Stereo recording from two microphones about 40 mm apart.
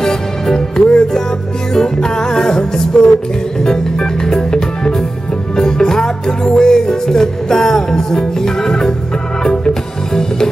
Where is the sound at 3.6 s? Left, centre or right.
Centre.